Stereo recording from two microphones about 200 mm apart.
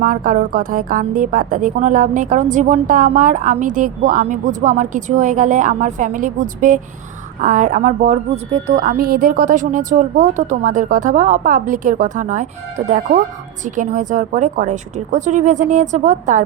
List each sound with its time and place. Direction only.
0.0 s a woman's voice: 40° right (ahead or behind)